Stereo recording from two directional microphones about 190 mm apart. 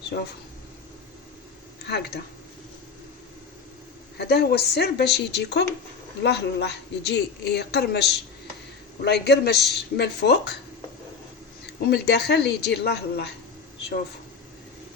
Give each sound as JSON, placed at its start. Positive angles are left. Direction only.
{"t": 0.1, "sound": "a woman's voice", "side_deg": 60}
{"t": 1.8, "sound": "speech", "side_deg": 60}
{"t": 4.2, "sound": "a woman's voice", "side_deg": 60}
{"t": 11.6, "sound": "a woman's voice", "side_deg": 60}